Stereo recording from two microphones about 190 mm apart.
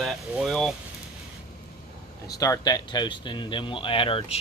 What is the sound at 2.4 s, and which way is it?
Speech, 20° left (ahead or behind).